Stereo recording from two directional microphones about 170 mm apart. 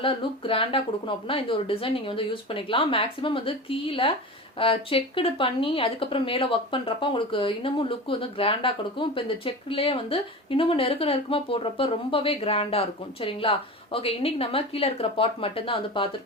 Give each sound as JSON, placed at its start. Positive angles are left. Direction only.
{"t": 0.0, "sound": "speech", "side_deg": 30}